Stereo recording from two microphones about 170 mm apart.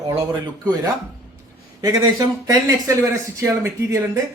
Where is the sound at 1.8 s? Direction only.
20° right (ahead or behind).